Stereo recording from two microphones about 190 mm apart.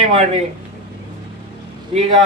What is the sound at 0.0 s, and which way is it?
Speech, 35° right (ahead or behind).